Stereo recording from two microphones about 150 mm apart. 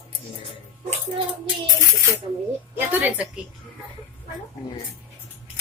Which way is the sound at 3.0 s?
10° right (ahead or behind).